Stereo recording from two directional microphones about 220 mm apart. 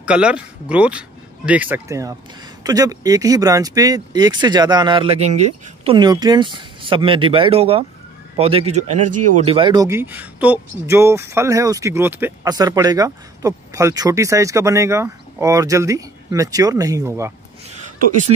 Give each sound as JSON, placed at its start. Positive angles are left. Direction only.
{"t": 0.0, "sound": "speech", "side_deg": -5}
{"t": 5.9, "sound": "speech", "side_deg": -20}
{"t": 9.0, "sound": "speech", "side_deg": -90}
{"t": 9.4, "sound": "speech", "side_deg": -25}
{"t": 17.6, "sound": "a sound", "side_deg": -35}